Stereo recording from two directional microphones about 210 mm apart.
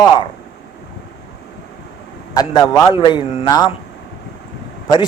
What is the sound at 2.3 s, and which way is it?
A man's voice, 15° left (ahead or behind).